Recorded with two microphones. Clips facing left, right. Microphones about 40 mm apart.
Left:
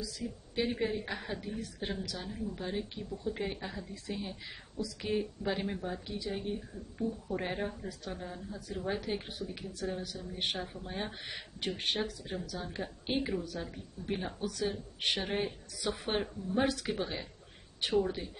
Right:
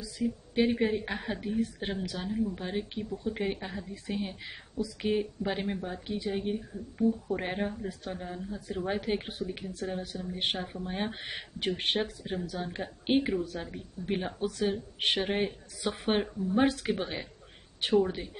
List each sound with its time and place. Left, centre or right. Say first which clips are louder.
0.7 s speech: right 5 dB; right
6.0 s speech: right 5 dB; right
8.5 s speech: right 3 dB; right